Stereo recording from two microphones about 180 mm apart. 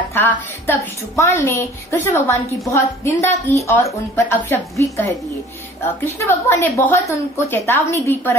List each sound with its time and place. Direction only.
0.1 s a woman's voice: 10° left (ahead or behind)
6.1 s a woman's voice: 15° left (ahead or behind)